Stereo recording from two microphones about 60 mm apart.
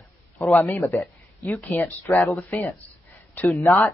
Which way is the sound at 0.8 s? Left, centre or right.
Left.